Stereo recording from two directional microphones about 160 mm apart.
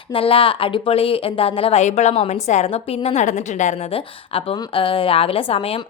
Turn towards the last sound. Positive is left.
turn(degrees=35)  # may be behind; listen again after turning